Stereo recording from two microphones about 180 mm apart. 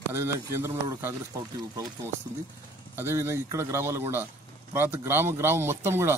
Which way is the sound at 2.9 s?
15° right (ahead or behind).